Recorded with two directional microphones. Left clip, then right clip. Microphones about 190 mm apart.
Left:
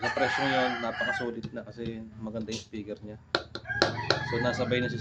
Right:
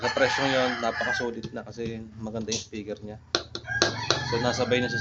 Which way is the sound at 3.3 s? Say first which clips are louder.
Right 2 dB; 5° left (ahead or behind).